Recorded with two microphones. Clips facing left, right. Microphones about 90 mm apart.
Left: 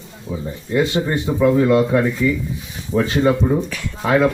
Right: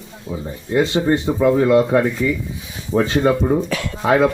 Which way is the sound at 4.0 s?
20° right (ahead or behind).